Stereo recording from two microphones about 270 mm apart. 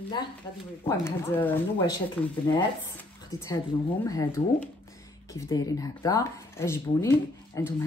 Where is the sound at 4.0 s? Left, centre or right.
Centre.